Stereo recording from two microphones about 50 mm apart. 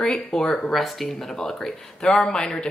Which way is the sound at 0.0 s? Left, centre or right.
Centre.